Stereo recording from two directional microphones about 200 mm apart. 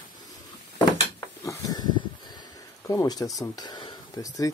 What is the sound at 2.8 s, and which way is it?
Speech, 20° left (ahead or behind).